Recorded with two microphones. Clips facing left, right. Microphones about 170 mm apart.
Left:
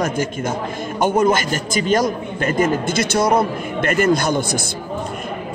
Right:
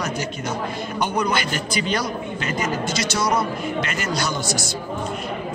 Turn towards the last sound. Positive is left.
turn(degrees=55)  # may be behind; listen again after turning